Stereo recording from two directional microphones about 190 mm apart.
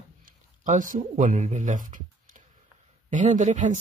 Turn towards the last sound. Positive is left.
turn(degrees=-40)  # may be behind; listen again after turning